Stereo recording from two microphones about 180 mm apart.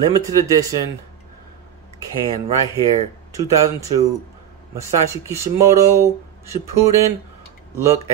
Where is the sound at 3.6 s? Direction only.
20° right (ahead or behind).